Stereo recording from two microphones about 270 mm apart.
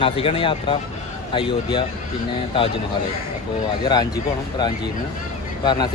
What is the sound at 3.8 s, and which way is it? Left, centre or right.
Speech, centre.